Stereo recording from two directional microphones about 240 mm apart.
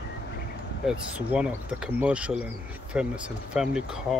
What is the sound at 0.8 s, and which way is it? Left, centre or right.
Speech, centre.